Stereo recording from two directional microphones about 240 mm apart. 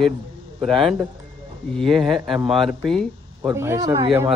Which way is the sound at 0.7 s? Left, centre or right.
Centre.